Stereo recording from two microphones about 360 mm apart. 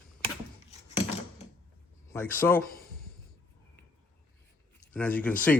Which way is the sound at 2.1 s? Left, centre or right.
Centre.